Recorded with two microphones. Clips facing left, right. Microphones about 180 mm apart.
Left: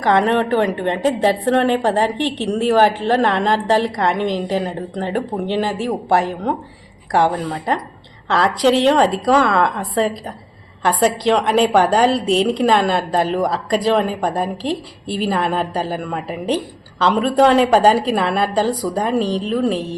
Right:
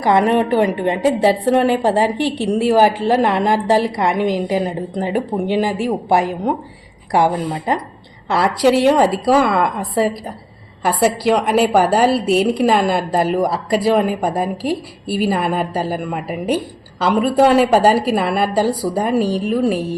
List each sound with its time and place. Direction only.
0.0 s a woman's voice: 10° right (ahead or behind)